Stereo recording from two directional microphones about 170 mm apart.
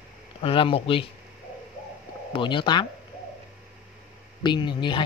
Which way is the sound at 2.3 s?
30° left (ahead or behind).